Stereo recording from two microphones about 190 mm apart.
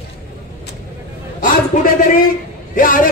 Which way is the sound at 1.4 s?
45° left (ahead or behind).